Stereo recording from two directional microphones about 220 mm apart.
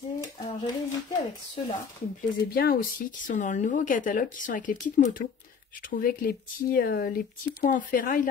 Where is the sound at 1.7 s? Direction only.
40° left (ahead or behind).